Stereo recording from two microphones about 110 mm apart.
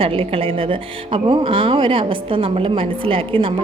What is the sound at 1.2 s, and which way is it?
A woman's voice, 50° right (ahead or behind).